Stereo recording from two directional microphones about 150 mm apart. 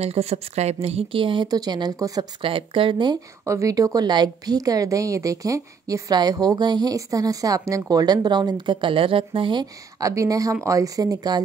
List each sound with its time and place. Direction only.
0.0 s a woman's voice: 45° right (ahead or behind); by 2.2 s 25° right (ahead or behind)
2.4 s speech: 35° right (ahead or behind)
3.4 s a woman's voice: 20° right (ahead or behind)